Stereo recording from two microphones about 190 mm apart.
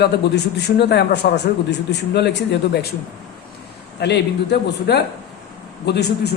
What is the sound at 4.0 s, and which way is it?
A man's voice, 65° left (ahead or behind).